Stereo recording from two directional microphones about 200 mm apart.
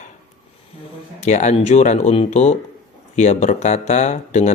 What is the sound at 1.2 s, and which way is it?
Speech, 35° left (ahead or behind).